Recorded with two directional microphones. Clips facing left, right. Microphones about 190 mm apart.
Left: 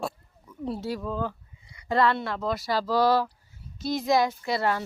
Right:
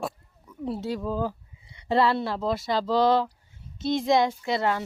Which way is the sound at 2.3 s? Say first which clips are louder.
Right 1 dB; 30° right (ahead or behind).